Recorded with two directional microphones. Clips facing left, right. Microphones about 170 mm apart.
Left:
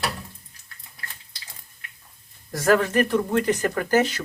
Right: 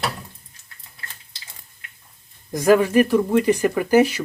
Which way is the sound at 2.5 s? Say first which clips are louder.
Right 4 dB; 15° right (ahead or behind).